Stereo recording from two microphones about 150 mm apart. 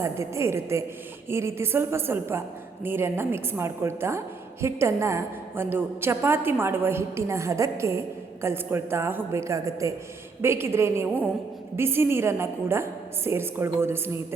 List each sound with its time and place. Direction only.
0.0 s a woman's voice: 20° right (ahead or behind)